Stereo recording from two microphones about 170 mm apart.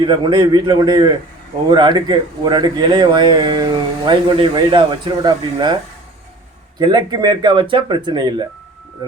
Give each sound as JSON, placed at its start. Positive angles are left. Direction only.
{"t": 0.0, "sound": "speech", "side_deg": -25}